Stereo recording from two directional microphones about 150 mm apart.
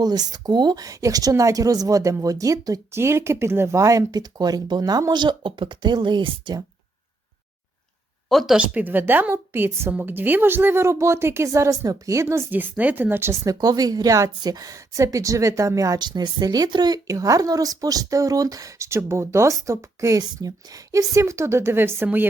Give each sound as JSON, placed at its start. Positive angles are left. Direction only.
{"t": 0.0, "sound": "a woman's voice", "side_deg": -25}
{"t": 8.3, "sound": "a woman's voice", "side_deg": 0}